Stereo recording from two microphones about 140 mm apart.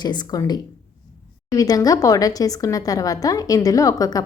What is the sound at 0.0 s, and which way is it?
Speech, 30° left (ahead or behind).